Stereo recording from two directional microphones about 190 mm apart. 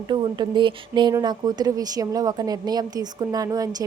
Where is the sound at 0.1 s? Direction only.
25° right (ahead or behind).